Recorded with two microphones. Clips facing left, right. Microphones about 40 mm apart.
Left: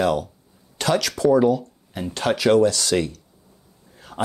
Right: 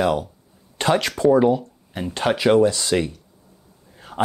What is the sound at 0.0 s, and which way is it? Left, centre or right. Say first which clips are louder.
Speech: even; centre.